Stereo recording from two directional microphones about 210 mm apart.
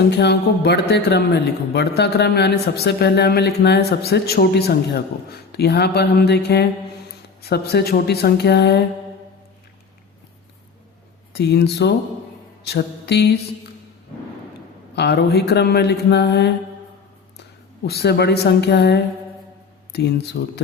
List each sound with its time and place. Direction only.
0.1 s a man's voice: 50° left (ahead or behind)
11.3 s a man's voice: 50° left (ahead or behind)
12.6 s mantra: 50° left (ahead or behind)
14.9 s a man's voice: 55° left (ahead or behind)
17.8 s a man's voice: 50° left (ahead or behind)
20.4 s a man's voice: 45° left (ahead or behind)